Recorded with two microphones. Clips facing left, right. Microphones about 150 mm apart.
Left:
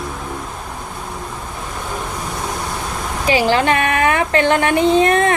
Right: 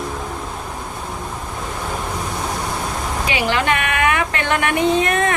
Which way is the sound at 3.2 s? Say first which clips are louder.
Left 6 dB; 35° left (ahead or behind).